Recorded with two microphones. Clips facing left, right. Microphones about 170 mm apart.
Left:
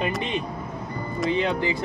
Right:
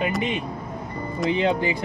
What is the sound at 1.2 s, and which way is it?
Speech, 20° right (ahead or behind).